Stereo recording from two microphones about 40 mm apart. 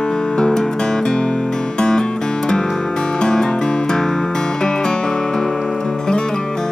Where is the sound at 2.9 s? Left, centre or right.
Centre.